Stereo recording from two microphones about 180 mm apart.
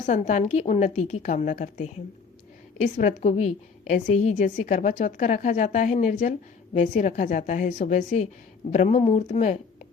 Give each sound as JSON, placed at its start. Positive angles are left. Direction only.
{"t": 0.0, "sound": "a woman's voice", "side_deg": 45}